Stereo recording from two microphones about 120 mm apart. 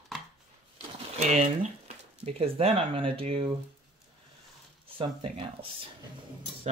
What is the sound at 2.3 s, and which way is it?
Speech, 55° right (ahead or behind).